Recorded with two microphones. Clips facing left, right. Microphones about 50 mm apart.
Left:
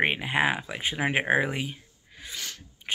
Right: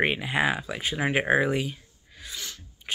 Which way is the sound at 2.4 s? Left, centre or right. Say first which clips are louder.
Left 1 dB; left.